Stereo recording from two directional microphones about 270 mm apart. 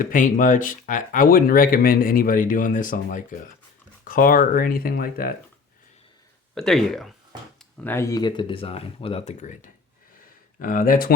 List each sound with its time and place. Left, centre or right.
0.0 s speech: left
6.5 s speech: centre; by 11.1 s left